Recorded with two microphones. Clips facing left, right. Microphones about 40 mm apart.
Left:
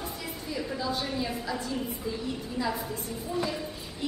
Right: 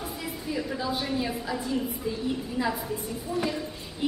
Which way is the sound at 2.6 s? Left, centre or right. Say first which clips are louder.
Right 2 dB; right.